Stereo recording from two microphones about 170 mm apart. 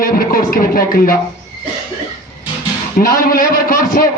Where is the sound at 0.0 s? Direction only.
55° left (ahead or behind).